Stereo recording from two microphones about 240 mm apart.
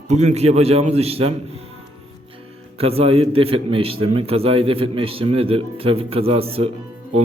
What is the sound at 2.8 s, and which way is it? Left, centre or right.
Speech, right.